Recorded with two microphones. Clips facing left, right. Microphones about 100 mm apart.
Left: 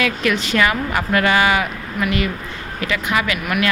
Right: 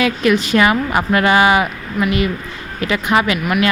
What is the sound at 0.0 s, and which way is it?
A woman's voice, 20° right (ahead or behind).